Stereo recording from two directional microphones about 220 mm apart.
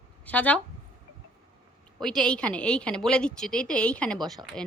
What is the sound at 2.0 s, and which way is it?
A woman's voice, 5° left (ahead or behind).